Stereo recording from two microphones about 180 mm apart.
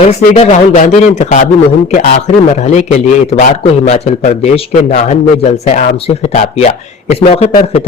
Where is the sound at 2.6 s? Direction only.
40° left (ahead or behind).